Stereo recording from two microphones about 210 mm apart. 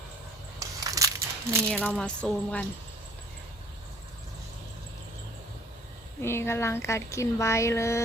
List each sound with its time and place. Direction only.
0.6 s crumpling: 15° right (ahead or behind)
1.6 s speech: 5° left (ahead or behind)
6.2 s speech: 10° left (ahead or behind)